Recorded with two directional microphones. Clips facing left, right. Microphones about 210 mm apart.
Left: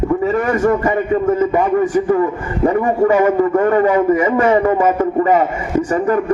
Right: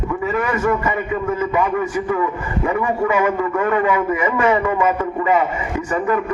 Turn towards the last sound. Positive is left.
turn(degrees=40)  # may be behind; listen again after turning